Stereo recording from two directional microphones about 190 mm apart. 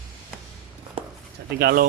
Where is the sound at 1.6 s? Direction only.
55° right (ahead or behind).